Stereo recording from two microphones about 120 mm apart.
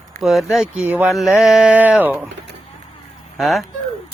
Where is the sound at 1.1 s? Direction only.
Centre (ahead or behind).